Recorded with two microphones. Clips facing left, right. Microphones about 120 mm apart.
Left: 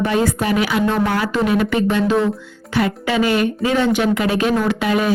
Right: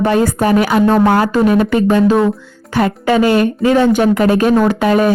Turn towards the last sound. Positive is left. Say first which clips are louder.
# right 6 dB
turn(degrees=-45)  # may be behind; listen again after turning